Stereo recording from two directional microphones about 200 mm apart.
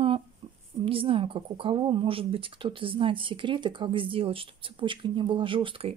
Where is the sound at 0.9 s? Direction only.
25° right (ahead or behind).